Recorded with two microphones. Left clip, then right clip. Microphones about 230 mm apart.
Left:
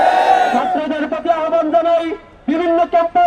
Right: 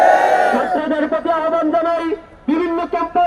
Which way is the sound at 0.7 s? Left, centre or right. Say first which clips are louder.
Right 1 dB; left.